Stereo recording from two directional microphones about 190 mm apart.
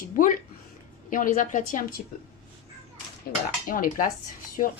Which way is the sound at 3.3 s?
50° left (ahead or behind).